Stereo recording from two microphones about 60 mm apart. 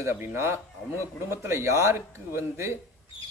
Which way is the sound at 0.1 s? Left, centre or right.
Right.